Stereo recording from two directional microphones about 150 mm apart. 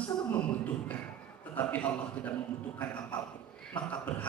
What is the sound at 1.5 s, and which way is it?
A man's voice, 10° left (ahead or behind).